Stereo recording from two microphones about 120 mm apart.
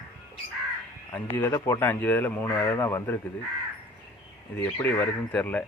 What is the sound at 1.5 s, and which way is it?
Speech, 20° left (ahead or behind).